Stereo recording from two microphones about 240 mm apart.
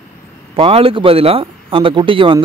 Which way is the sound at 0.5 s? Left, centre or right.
Right.